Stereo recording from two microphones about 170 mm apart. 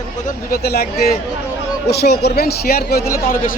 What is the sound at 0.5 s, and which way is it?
Speech, 65° left (ahead or behind).